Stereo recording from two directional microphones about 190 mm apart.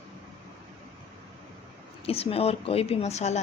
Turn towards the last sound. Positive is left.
turn(degrees=35)  # may be behind; listen again after turning